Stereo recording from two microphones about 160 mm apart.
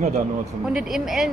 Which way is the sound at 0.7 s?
5° right (ahead or behind).